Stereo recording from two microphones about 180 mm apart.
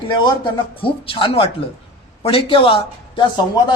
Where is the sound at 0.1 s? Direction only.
25° left (ahead or behind).